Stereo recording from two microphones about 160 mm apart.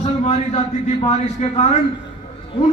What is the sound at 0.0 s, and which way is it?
A man's voice, 45° left (ahead or behind).